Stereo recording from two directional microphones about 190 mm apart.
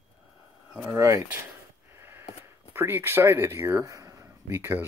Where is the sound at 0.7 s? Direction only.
15° right (ahead or behind).